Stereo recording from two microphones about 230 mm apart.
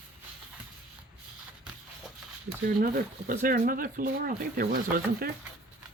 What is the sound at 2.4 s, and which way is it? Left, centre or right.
Speech, right.